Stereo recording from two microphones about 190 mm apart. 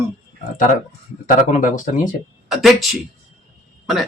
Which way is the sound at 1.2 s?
45° left (ahead or behind).